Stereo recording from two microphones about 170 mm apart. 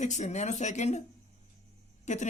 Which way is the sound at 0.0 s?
45° left (ahead or behind).